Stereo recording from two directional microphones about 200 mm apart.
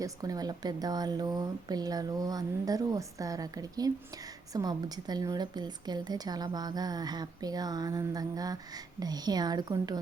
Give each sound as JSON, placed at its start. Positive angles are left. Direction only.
{"t": 0.0, "sound": "a woman's voice", "side_deg": -20}